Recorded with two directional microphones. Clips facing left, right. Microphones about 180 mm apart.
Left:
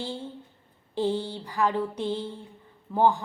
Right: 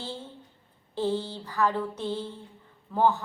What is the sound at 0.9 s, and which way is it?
A man's voice, 15° left (ahead or behind).